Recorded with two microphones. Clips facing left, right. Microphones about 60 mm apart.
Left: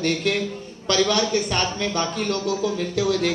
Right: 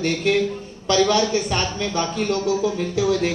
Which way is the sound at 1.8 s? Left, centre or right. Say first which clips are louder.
Right 1 dB; left.